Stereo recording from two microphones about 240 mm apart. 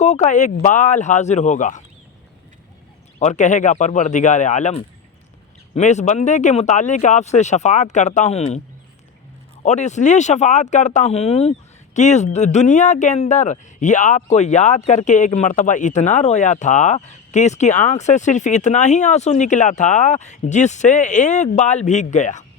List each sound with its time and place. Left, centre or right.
0.0 s speech: left
3.2 s speech: left
9.6 s speech: left